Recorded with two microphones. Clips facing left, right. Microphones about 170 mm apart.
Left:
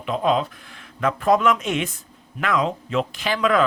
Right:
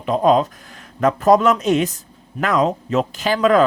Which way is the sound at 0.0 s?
40° right (ahead or behind).